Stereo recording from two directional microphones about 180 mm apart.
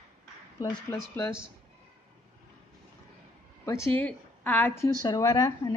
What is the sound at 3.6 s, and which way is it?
Speech, 15° left (ahead or behind).